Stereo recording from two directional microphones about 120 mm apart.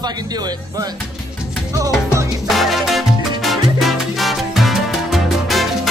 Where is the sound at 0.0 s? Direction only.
35° right (ahead or behind).